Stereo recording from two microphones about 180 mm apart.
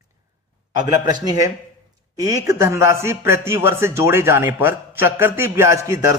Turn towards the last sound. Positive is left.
turn(degrees=-15)  # may be behind; listen again after turning